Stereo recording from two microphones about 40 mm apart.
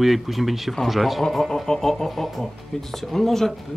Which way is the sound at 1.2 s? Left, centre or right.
Centre.